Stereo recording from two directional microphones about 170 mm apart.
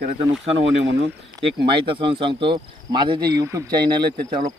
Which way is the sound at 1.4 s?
20° right (ahead or behind).